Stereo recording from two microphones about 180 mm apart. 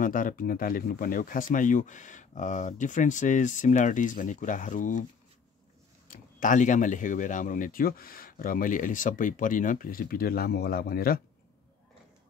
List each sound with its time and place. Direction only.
0.0 s speech: 50° left (ahead or behind)
6.0 s speech: 45° left (ahead or behind)